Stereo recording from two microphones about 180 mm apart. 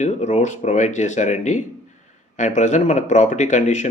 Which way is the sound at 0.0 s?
40° left (ahead or behind).